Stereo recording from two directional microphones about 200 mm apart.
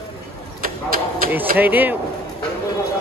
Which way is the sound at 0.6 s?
45° right (ahead or behind).